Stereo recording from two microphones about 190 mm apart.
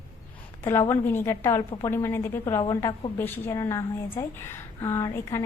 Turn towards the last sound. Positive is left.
turn(degrees=15)  # may be behind; listen again after turning